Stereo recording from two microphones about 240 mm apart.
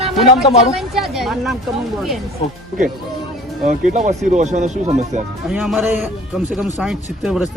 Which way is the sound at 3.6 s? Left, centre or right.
Right.